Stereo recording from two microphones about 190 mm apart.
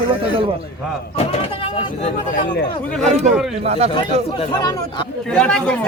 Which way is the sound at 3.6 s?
35° right (ahead or behind).